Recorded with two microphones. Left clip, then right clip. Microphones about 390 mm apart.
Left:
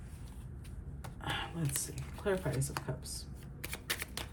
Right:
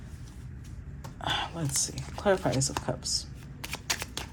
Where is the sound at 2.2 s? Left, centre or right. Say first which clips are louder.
Right 9 dB; centre.